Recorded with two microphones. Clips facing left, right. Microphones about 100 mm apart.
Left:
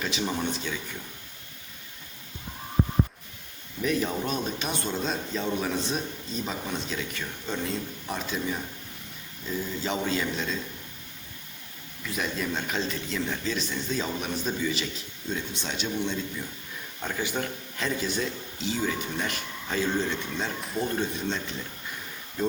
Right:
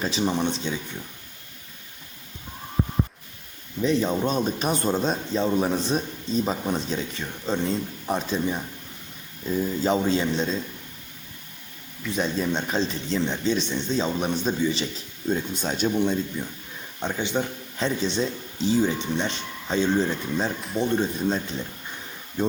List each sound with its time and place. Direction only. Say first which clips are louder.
0.0 s a man's voice: right 5 dB; 35° right (ahead or behind)
3.8 s speech: right 5 dB; 25° right (ahead or behind)
9.8 s speech: right 6 dB; 35° right (ahead or behind)
12.1 s a man's voice: right 5 dB; 30° right (ahead or behind)
15.3 s speech: right 7 dB; 45° right (ahead or behind)
17.0 s a man's voice: right 4 dB; 25° right (ahead or behind)